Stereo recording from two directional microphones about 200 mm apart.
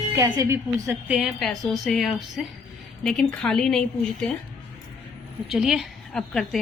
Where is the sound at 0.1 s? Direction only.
15° right (ahead or behind).